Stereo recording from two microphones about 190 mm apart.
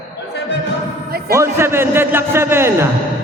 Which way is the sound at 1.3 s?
15° right (ahead or behind).